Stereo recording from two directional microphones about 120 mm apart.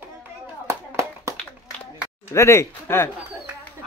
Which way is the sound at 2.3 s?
25° left (ahead or behind).